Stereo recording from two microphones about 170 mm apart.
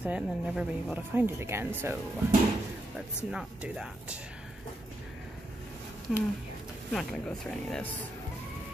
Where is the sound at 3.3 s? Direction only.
5° right (ahead or behind).